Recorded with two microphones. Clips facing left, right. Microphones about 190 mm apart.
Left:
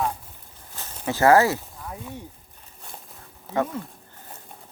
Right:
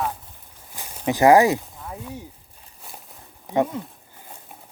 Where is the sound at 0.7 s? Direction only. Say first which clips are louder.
Right 4 dB; 15° right (ahead or behind).